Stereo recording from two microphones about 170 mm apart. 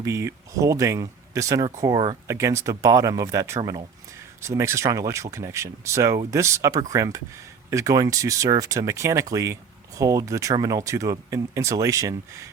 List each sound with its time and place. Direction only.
0.0 s speech: 15° right (ahead or behind)